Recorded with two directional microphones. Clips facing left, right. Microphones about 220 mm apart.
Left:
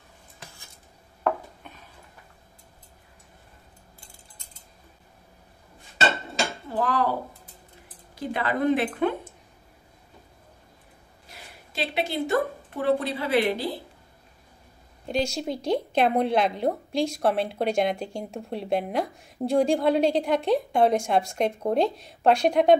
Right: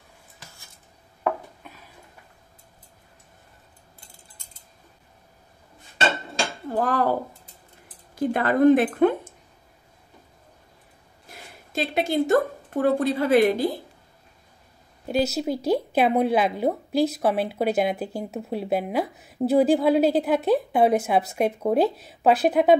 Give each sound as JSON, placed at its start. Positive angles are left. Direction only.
{"t": 1.6, "sound": "a sound", "side_deg": -5}
{"t": 6.7, "sound": "speech", "side_deg": -45}
{"t": 8.1, "sound": "a woman's voice", "side_deg": -50}
{"t": 11.2, "sound": "a woman's voice", "side_deg": -45}
{"t": 15.0, "sound": "a woman's voice", "side_deg": -5}